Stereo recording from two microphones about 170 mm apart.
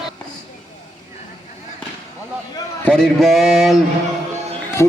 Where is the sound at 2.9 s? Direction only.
Centre (ahead or behind).